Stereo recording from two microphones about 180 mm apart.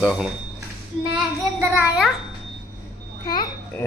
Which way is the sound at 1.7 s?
10° right (ahead or behind).